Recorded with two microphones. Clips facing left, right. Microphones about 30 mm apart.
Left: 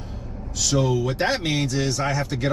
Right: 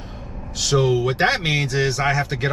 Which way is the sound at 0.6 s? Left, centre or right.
Right.